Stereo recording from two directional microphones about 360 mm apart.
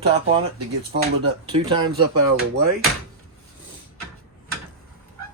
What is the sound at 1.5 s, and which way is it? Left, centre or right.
Speech, centre.